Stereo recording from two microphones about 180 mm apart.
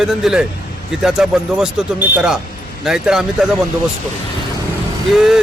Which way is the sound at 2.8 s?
5° right (ahead or behind).